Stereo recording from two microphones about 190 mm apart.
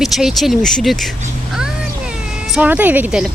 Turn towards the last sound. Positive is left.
turn(degrees=-5)  # may be behind; listen again after turning